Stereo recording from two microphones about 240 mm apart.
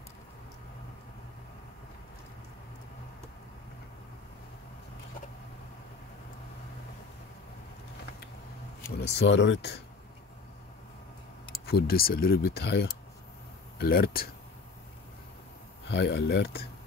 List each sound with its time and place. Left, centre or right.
9.1 s speech: left
11.6 s speech: left
15.9 s speech: left